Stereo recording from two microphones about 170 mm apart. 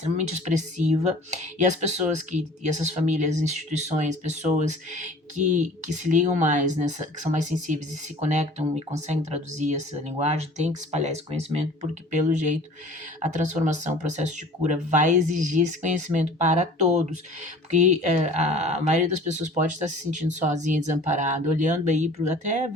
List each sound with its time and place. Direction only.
0.2 s speech: 45° right (ahead or behind)